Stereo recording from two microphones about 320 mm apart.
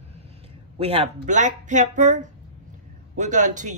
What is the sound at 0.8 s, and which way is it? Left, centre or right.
Speech, centre.